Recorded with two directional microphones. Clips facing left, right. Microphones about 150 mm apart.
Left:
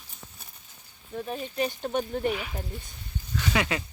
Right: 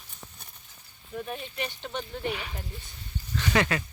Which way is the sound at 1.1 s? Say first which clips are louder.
Left 4 dB; 30° left (ahead or behind).